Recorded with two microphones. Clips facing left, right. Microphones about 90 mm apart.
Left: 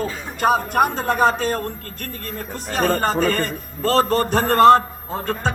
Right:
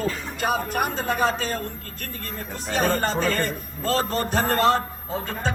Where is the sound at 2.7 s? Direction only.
45° left (ahead or behind).